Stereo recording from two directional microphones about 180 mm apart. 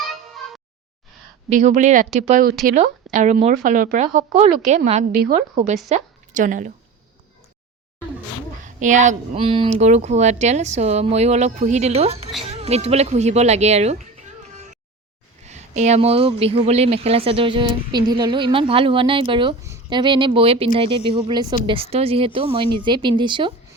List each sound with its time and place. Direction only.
1.5 s a woman's voice: 40° right (ahead or behind)
8.6 s a woman's voice: 45° right (ahead or behind)
9.4 s a woman's voice: 30° right (ahead or behind)
15.4 s a woman's voice: 40° right (ahead or behind)